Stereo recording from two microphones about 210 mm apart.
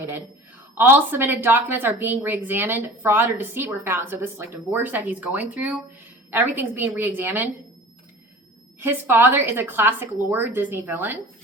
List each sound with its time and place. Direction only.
0.8 s a woman's voice: 10° right (ahead or behind)
8.8 s a woman's voice: 10° right (ahead or behind)